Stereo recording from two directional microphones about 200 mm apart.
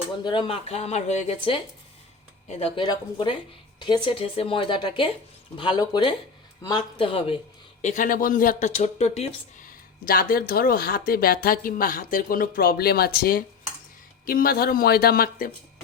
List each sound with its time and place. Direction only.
0.3 s a woman's voice: 25° left (ahead or behind)
7.8 s speech: 40° left (ahead or behind)
9.6 s speech: 45° left (ahead or behind)